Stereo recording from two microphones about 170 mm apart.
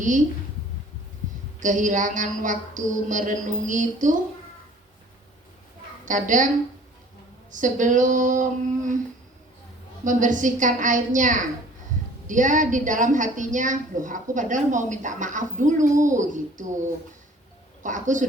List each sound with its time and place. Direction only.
1.5 s a woman's voice: 50° right (ahead or behind)
6.1 s a woman's voice: 50° right (ahead or behind)
7.5 s a woman's voice: 50° right (ahead or behind)
10.0 s a woman's voice: 50° right (ahead or behind)
17.8 s a woman's voice: 45° right (ahead or behind)